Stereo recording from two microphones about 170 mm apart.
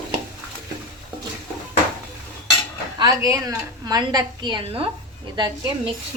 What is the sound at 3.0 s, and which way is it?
A woman's voice, 20° right (ahead or behind).